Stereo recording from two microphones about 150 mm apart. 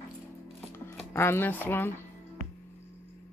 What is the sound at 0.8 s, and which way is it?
Speech, 15° left (ahead or behind).